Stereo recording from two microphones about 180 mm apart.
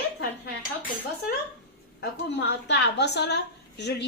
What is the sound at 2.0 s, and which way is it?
A woman's voice, 65° left (ahead or behind).